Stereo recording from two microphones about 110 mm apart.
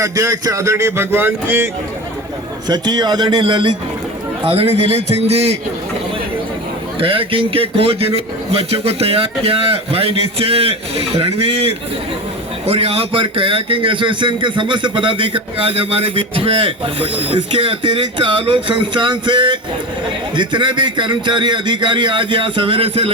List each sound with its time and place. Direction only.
0.0 s a man's voice: 30° right (ahead or behind)
2.6 s a man's voice: 40° right (ahead or behind)
4.4 s a man's voice: 60° right (ahead or behind)
7.0 s a man's voice: 55° right (ahead or behind)